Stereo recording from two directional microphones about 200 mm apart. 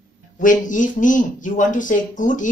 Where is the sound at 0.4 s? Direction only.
40° left (ahead or behind).